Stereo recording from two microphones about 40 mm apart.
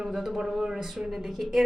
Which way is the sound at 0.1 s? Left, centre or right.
Centre.